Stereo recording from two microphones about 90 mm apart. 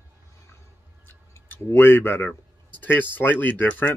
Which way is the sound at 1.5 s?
25° left (ahead or behind).